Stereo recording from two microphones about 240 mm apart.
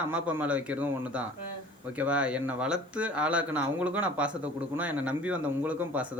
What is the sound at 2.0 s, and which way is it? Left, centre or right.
Speech, centre.